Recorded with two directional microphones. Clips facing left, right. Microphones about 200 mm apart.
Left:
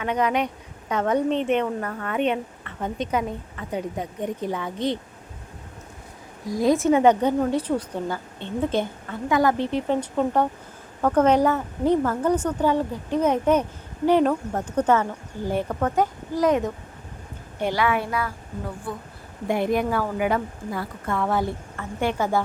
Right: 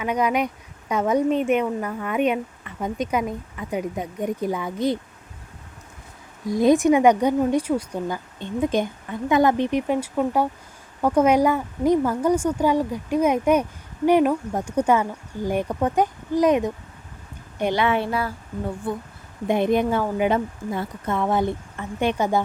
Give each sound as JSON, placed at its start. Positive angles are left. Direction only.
{"t": 0.0, "sound": "a woman's voice", "side_deg": -10}
{"t": 6.5, "sound": "a woman's voice", "side_deg": -20}